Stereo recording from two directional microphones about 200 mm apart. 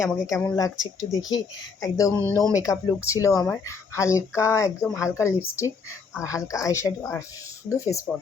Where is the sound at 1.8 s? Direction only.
15° left (ahead or behind).